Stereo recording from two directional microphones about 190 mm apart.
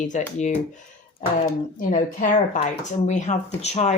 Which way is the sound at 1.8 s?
45° left (ahead or behind).